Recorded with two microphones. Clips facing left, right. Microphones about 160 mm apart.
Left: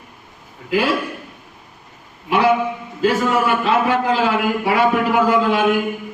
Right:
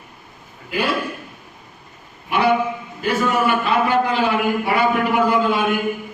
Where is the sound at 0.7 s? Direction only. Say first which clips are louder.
Left 4 dB; 90° left.